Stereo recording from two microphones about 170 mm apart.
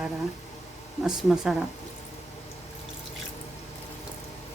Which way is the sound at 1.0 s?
Centre (ahead or behind).